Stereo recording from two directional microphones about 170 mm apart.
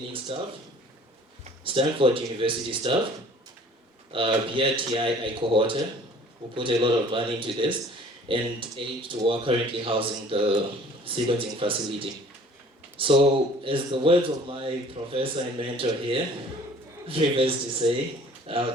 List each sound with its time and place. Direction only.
0.3 s speech: 30° right (ahead or behind)
1.6 s speech: 30° right (ahead or behind)
4.1 s speech: 30° right (ahead or behind)